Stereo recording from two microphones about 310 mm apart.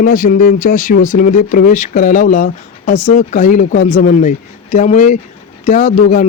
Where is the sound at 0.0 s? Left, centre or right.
Left.